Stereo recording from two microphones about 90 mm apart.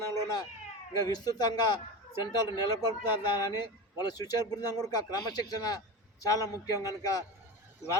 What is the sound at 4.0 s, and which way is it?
A man's voice, 45° left (ahead or behind).